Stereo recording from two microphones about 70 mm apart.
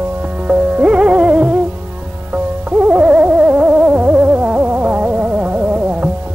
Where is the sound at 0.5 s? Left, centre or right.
Centre.